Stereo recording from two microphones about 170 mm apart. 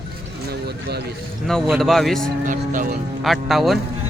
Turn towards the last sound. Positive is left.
turn(degrees=0)  # may be behind; listen again after turning